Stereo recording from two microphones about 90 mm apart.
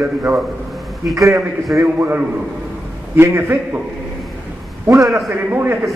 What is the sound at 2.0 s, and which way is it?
A man's voice, 20° right (ahead or behind).